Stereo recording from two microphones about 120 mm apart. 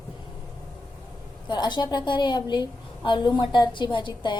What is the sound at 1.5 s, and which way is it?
A woman's voice, 40° left (ahead or behind).